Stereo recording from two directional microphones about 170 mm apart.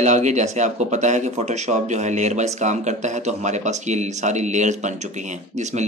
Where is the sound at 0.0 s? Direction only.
45° right (ahead or behind).